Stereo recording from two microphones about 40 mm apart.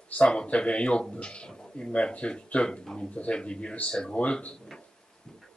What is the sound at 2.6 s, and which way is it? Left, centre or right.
Speech, centre.